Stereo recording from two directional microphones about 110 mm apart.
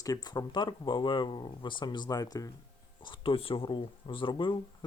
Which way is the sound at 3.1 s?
55° left (ahead or behind).